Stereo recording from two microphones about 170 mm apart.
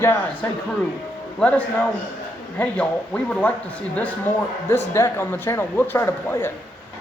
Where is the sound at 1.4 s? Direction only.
10° left (ahead or behind).